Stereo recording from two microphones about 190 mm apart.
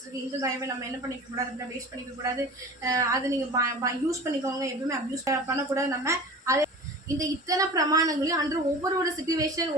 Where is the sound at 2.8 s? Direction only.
15° right (ahead or behind).